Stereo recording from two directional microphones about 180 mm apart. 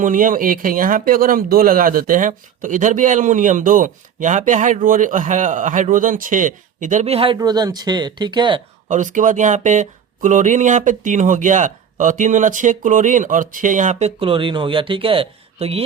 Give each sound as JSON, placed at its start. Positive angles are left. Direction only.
{"t": 0.0, "sound": "speech", "side_deg": -50}
{"t": 7.3, "sound": "speech", "side_deg": -20}
{"t": 8.9, "sound": "speech", "side_deg": -45}
{"t": 14.2, "sound": "speech", "side_deg": -30}